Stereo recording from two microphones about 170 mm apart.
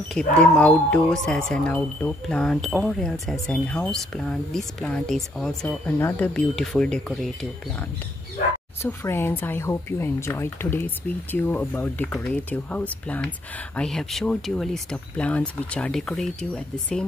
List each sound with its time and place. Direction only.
0.4 s speech: 5° left (ahead or behind)
8.8 s speech: 15° left (ahead or behind)